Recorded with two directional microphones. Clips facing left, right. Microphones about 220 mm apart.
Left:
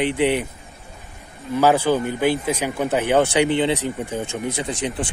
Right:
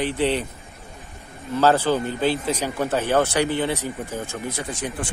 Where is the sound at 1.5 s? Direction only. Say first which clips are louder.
Left 2 dB; 10° left (ahead or behind).